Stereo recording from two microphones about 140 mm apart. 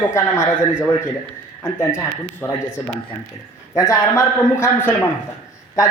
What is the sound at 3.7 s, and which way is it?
A man's voice, 20° left (ahead or behind).